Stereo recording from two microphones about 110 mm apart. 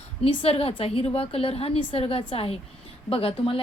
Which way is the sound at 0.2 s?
60° left (ahead or behind).